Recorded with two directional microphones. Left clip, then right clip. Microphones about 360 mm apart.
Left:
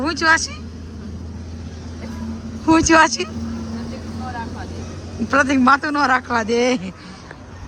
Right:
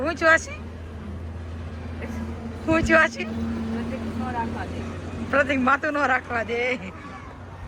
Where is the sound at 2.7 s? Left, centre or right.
Centre.